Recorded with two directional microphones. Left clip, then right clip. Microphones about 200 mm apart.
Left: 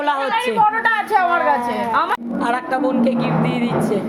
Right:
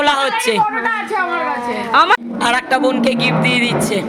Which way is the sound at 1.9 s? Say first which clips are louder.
Right 9 dB; 40° right (ahead or behind).